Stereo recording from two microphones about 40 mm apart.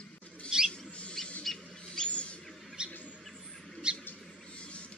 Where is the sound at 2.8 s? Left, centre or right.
Right.